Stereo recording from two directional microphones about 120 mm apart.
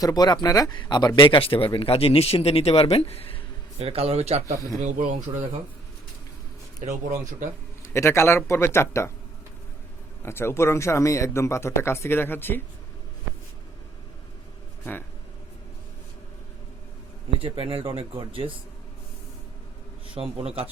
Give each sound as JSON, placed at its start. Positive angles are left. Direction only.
{"t": 0.0, "sound": "speech", "side_deg": 35}
{"t": 1.4, "sound": "speech", "side_deg": 50}
{"t": 3.8, "sound": "a man's voice", "side_deg": -55}
{"t": 4.8, "sound": "speech", "side_deg": -90}
{"t": 7.8, "sound": "speech", "side_deg": 20}
{"t": 10.2, "sound": "speech", "side_deg": 20}
{"t": 17.4, "sound": "speech", "side_deg": -50}
{"t": 20.2, "sound": "speech", "side_deg": -50}